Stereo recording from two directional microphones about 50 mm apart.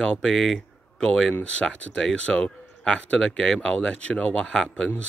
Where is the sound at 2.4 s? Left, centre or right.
Centre.